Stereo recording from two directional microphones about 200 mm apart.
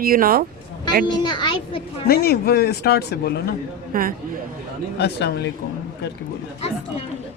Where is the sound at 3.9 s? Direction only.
45° right (ahead or behind).